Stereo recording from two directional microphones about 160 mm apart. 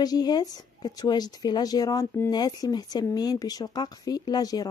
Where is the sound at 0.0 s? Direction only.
25° left (ahead or behind).